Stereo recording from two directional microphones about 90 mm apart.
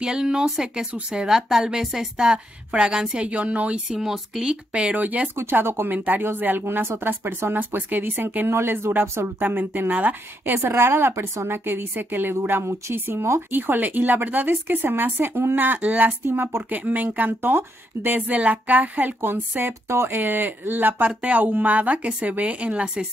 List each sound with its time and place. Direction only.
0.0 s a woman's voice: 5° right (ahead or behind)